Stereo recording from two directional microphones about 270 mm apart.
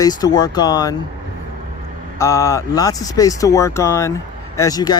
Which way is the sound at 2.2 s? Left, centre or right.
Centre.